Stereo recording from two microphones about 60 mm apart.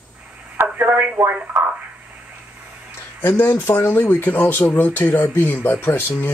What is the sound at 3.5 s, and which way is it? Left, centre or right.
Speech, left.